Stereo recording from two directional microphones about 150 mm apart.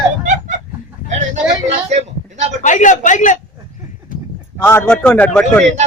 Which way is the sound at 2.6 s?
55° left (ahead or behind).